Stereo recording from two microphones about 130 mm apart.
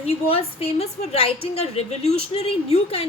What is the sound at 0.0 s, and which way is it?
A woman's voice, 50° left (ahead or behind).